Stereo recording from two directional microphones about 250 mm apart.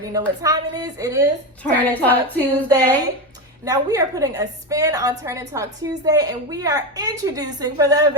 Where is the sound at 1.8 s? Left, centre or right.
Centre.